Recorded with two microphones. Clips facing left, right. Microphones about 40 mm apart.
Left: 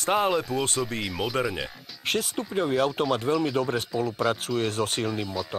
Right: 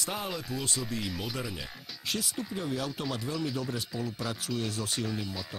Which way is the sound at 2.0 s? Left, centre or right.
Left.